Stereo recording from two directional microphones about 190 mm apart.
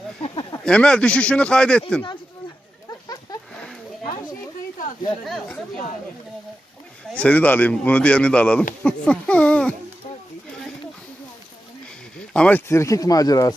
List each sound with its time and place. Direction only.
0.2 s a sound: 25° left (ahead or behind)
0.6 s speech: 5° left (ahead or behind)
5.2 s speech: centre (ahead or behind)
7.2 s speech: 10° left (ahead or behind)
12.2 s speech: 5° left (ahead or behind)